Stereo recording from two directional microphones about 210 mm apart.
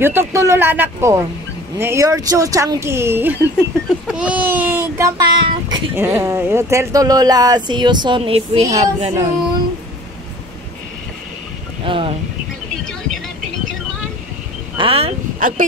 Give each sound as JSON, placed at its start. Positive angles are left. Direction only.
{"t": 0.0, "sound": "speech", "side_deg": -10}
{"t": 11.8, "sound": "speech", "side_deg": -25}
{"t": 14.8, "sound": "speech", "side_deg": -25}